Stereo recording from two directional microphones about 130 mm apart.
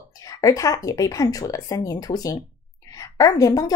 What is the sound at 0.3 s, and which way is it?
A woman's voice, 25° left (ahead or behind).